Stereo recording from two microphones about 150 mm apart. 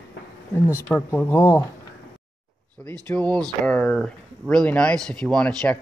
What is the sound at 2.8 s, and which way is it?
Speech, 10° left (ahead or behind).